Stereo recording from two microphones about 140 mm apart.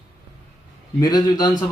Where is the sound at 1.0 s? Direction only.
30° left (ahead or behind).